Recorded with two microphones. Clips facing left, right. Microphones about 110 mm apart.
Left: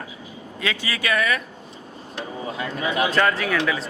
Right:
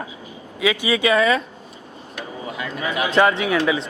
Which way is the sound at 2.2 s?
30° left (ahead or behind).